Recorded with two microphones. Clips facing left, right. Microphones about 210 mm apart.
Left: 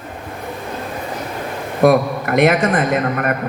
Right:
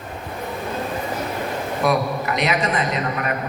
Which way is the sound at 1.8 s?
50° left (ahead or behind).